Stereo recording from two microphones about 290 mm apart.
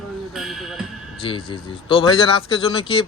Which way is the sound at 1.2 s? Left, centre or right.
Centre.